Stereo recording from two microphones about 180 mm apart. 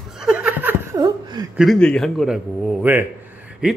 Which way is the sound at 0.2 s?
5° right (ahead or behind).